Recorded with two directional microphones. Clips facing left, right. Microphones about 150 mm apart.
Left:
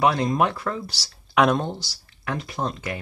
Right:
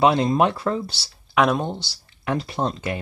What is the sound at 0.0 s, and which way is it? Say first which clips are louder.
Speech: right 3 dB; 25° right (ahead or behind).